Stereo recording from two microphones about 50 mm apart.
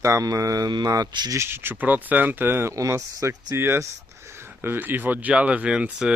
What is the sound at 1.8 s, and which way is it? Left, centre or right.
Speech, right.